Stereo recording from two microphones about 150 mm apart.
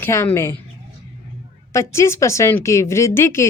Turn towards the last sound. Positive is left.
turn(degrees=15)  # may be behind; listen again after turning